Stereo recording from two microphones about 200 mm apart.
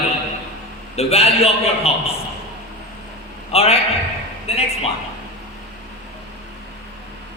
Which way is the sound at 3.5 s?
30° left (ahead or behind).